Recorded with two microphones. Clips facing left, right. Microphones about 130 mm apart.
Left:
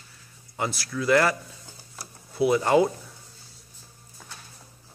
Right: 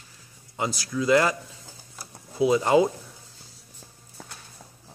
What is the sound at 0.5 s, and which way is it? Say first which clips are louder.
Speech: right 1 dB; 20° right (ahead or behind).